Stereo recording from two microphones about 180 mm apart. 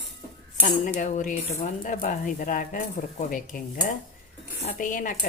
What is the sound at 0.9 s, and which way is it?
Speech, 45° left (ahead or behind).